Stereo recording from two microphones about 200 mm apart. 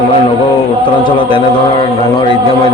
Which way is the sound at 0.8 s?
25° left (ahead or behind).